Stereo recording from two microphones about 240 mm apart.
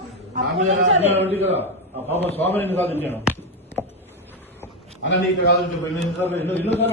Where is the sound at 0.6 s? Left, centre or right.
Right.